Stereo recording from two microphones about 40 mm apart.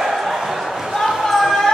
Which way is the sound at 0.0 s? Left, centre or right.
Centre.